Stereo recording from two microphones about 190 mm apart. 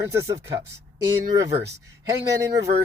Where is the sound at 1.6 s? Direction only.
20° right (ahead or behind).